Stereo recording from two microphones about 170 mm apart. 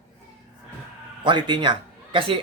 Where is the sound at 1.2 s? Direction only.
25° right (ahead or behind).